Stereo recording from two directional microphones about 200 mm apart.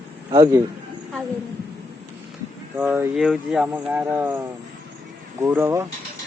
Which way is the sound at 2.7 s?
10° right (ahead or behind).